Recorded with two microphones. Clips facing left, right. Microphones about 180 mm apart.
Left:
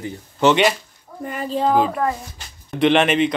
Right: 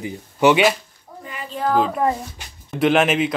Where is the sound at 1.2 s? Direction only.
45° left (ahead or behind).